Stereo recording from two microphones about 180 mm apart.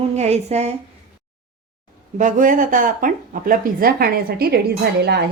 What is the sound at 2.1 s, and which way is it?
A woman's voice, 45° right (ahead or behind).